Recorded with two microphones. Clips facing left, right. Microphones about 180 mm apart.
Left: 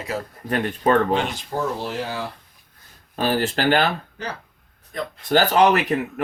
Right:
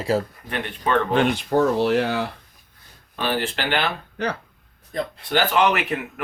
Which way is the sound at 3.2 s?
40° left (ahead or behind).